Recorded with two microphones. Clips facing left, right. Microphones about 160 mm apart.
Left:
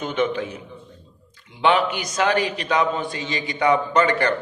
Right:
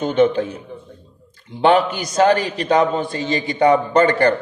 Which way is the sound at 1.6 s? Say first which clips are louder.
Right 4 dB; 40° right (ahead or behind).